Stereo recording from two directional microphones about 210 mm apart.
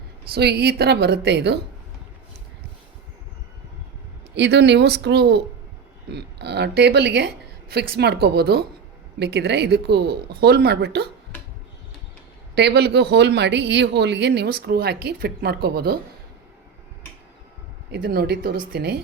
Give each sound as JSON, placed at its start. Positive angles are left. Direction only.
{"t": 0.3, "sound": "speech", "side_deg": -50}
{"t": 4.4, "sound": "speech", "side_deg": -55}
{"t": 12.5, "sound": "speech", "side_deg": -50}
{"t": 17.9, "sound": "speech", "side_deg": -45}